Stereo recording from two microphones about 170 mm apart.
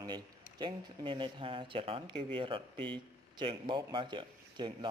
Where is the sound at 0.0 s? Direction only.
25° right (ahead or behind).